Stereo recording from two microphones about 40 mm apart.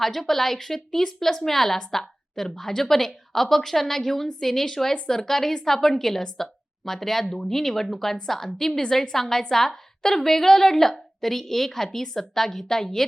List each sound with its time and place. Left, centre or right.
0.0 s a woman's voice: centre